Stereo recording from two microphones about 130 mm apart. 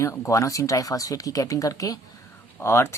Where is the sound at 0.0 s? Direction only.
20° left (ahead or behind).